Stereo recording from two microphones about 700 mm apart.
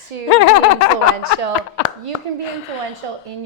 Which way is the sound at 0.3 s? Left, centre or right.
Left.